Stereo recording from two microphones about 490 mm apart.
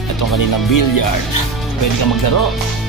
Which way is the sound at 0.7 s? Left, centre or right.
Left.